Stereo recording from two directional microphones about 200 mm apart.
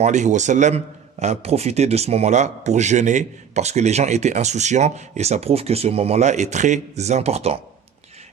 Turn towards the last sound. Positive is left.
turn(degrees=-30)  # may be behind; listen again after turning